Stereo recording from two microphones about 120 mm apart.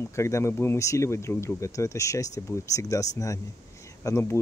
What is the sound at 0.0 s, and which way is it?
Speech, 25° left (ahead or behind).